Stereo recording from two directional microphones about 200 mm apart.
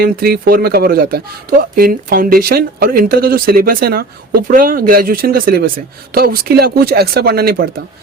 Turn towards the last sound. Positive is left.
turn(degrees=-50)  # may be behind; listen again after turning